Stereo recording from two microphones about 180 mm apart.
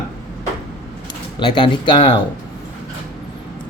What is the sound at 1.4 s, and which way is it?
Speech, 25° left (ahead or behind).